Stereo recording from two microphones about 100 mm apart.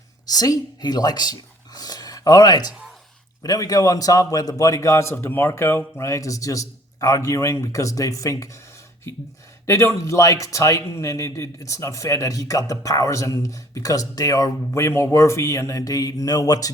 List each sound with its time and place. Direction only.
0.3 s a man's voice: 40° left (ahead or behind)
9.6 s a man's voice: 30° left (ahead or behind)